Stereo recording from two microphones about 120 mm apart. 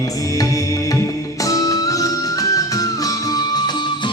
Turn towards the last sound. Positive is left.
turn(degrees=35)  # may be behind; listen again after turning